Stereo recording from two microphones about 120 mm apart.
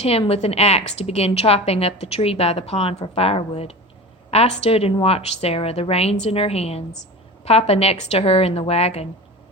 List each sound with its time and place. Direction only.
0.0 s a woman's voice: 55° left (ahead or behind)